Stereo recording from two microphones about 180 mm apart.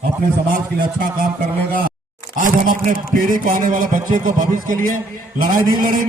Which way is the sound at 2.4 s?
45° right (ahead or behind).